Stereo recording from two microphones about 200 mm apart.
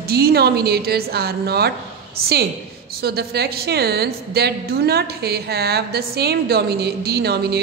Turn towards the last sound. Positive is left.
turn(degrees=-55)  # may be behind; listen again after turning